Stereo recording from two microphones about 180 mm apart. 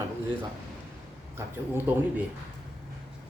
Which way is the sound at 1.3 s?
10° right (ahead or behind).